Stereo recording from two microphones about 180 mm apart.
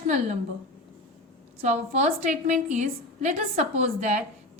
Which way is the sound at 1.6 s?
40° right (ahead or behind).